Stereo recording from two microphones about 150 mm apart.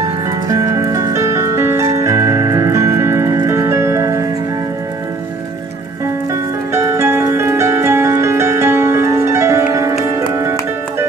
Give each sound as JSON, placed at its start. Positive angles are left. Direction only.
{"t": 0.5, "sound": "music", "side_deg": -20}
{"t": 6.7, "sound": "music", "side_deg": -20}